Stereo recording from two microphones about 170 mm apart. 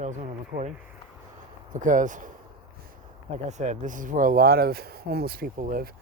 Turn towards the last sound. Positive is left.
turn(degrees=-55)  # may be behind; listen again after turning